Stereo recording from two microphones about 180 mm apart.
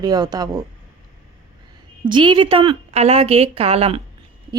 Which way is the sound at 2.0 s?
25° right (ahead or behind).